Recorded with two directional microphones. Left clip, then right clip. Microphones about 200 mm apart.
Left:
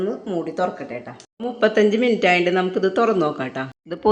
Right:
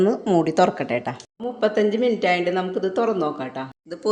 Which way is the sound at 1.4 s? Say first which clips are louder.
Left 3 dB; 30° left (ahead or behind).